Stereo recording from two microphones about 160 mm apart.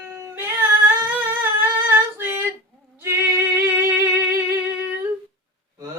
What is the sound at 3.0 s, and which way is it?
Music, 15° right (ahead or behind).